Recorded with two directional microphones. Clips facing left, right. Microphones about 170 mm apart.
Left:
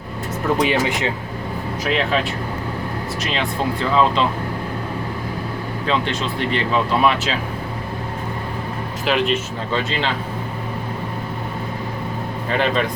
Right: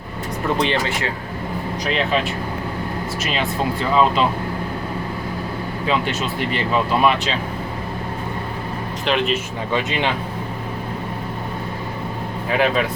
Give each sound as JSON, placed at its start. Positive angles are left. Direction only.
{"t": 0.6, "sound": "speech", "side_deg": 10}
{"t": 5.8, "sound": "speech", "side_deg": -5}
{"t": 9.0, "sound": "speech", "side_deg": 0}
{"t": 9.7, "sound": "speech", "side_deg": -15}
{"t": 12.5, "sound": "speech", "side_deg": -5}